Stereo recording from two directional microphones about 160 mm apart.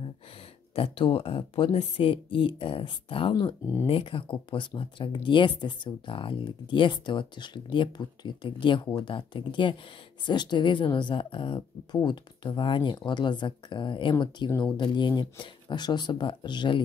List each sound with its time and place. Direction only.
0.7 s speech: 35° left (ahead or behind)